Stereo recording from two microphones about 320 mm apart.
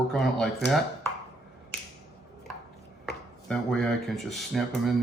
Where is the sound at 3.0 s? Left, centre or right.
Centre.